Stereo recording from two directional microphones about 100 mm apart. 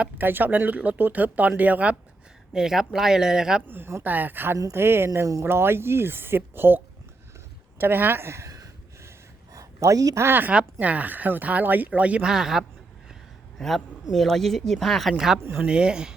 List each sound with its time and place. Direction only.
0.0 s speech: 20° right (ahead or behind)
3.7 s speech: 25° right (ahead or behind)
7.8 s a sound: 20° right (ahead or behind)
9.6 s speech: 35° right (ahead or behind)
10.2 s speech: 20° right (ahead or behind); by 15.1 s centre (ahead or behind)
15.4 s speech: 25° right (ahead or behind)
15.6 s speech: 10° right (ahead or behind)